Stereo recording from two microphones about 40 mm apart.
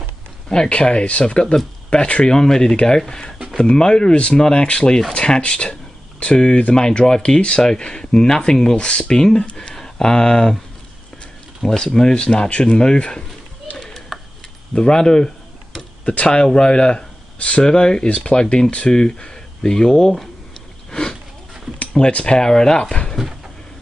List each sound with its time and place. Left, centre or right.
0.5 s speech: left
2.3 s speech: centre
11.6 s speech: centre
13.7 s a sound: centre
14.7 s speech: centre
17.6 s speech: left
20.9 s a sound: centre
21.9 s speech: left